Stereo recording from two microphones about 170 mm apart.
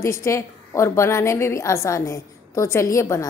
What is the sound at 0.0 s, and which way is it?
A woman's voice, 15° left (ahead or behind).